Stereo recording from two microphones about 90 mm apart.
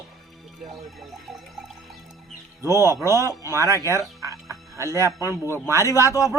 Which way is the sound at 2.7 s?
35° right (ahead or behind).